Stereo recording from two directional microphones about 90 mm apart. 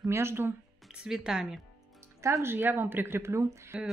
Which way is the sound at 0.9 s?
10° right (ahead or behind).